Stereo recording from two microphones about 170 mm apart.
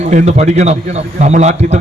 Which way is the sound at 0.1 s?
45° right (ahead or behind).